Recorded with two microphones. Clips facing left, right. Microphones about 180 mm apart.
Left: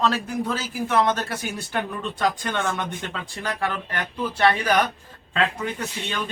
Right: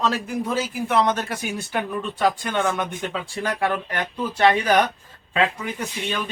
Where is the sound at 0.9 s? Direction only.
15° right (ahead or behind).